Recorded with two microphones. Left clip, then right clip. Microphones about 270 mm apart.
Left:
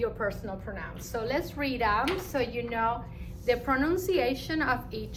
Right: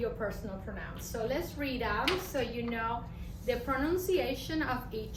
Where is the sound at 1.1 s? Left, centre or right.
Centre.